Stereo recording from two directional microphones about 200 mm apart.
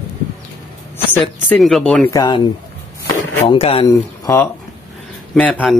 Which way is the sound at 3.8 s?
15° left (ahead or behind).